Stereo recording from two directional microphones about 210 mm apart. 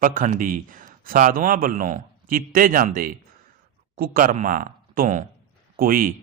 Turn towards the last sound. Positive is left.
turn(degrees=-40)  # may be behind; listen again after turning